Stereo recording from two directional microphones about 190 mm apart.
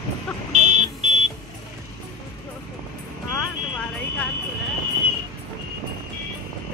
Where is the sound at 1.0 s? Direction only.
35° right (ahead or behind).